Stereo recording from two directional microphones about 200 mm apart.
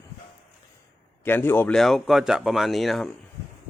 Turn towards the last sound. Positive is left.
turn(degrees=0)  # may be behind; listen again after turning